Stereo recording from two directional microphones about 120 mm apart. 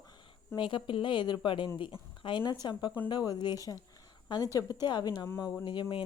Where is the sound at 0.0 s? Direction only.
40° left (ahead or behind).